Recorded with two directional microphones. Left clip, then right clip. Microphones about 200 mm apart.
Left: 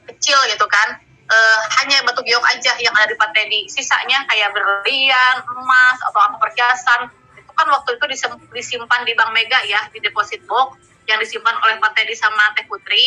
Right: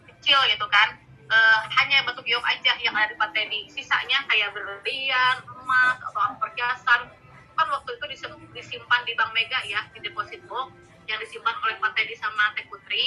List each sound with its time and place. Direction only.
0.3 s a woman's voice: 45° left (ahead or behind)